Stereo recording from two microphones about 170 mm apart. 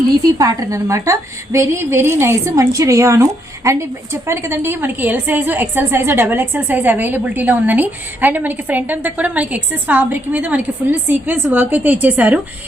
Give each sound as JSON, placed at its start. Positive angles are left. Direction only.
{"t": 0.3, "sound": "a woman's voice", "side_deg": -20}